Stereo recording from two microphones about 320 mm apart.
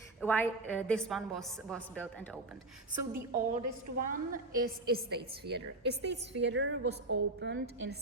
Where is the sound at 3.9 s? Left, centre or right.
Right.